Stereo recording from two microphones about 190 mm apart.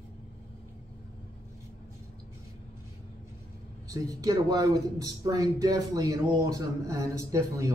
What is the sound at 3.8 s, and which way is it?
A man's voice, 20° right (ahead or behind).